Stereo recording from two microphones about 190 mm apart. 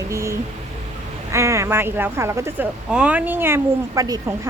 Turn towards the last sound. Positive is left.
turn(degrees=-20)  # may be behind; listen again after turning